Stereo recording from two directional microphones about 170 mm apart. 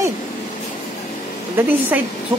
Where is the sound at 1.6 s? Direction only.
10° right (ahead or behind).